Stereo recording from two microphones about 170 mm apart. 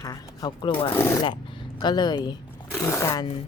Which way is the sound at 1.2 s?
30° left (ahead or behind).